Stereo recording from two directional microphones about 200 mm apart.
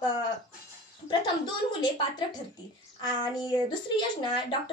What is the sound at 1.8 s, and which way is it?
A woman's voice, 25° left (ahead or behind).